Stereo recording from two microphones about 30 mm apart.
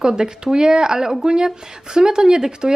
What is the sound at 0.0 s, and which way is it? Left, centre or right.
Speech, right.